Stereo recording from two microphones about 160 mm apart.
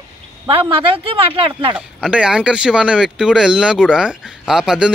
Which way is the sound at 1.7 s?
5° right (ahead or behind).